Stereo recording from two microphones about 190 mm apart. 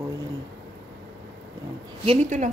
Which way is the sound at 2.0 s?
35° right (ahead or behind).